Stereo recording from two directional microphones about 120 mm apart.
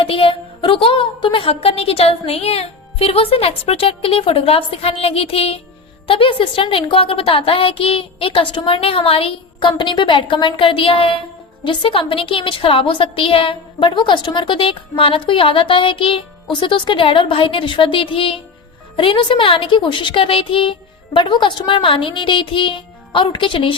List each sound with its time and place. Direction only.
0.0 s a woman's voice: 50° left (ahead or behind)